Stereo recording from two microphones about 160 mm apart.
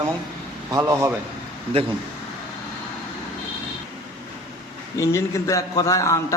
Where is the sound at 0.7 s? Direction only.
20° right (ahead or behind).